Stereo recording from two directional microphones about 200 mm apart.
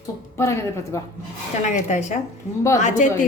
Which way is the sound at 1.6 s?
35° left (ahead or behind).